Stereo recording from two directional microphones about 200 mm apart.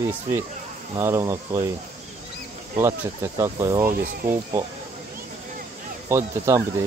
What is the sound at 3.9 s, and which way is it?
Speech, 45° right (ahead or behind).